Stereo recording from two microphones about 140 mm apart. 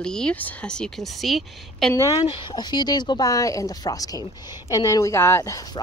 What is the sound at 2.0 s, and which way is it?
Speech, 25° left (ahead or behind).